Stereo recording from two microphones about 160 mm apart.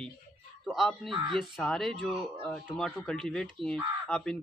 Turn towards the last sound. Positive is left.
turn(degrees=5)  # may be behind; listen again after turning